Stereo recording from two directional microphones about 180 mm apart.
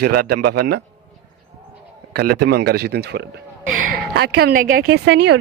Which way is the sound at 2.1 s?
60° right (ahead or behind).